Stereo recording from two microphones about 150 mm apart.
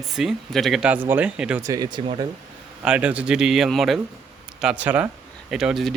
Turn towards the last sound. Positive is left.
turn(degrees=0)  # may be behind; listen again after turning